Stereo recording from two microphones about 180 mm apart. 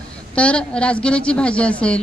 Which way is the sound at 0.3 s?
5° left (ahead or behind).